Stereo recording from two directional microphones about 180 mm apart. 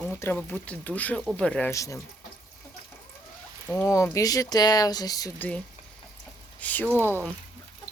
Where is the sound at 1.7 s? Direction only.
15° left (ahead or behind).